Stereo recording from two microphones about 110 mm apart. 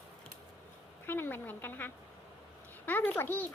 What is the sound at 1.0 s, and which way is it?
A child's voice, 20° left (ahead or behind).